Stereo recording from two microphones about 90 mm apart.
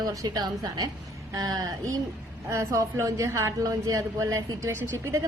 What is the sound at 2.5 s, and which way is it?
A woman's voice, 35° right (ahead or behind).